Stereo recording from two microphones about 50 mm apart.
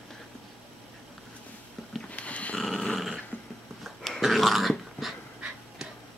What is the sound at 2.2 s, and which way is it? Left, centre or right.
Dog, left.